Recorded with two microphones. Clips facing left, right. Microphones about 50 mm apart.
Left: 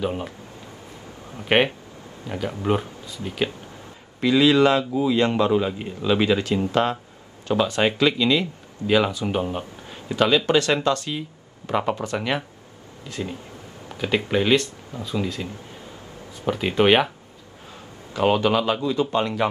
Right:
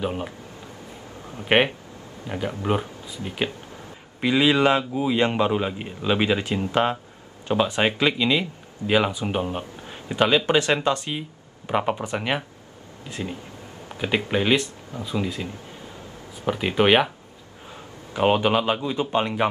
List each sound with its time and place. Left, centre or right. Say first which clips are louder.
0.0 s speech: left 1 dB; centre
1.5 s a man's voice: even; centre
10.0 s a man's voice: left 1 dB; centre
13.9 s speech: left 1 dB; centre
18.1 s a man's voice: even; centre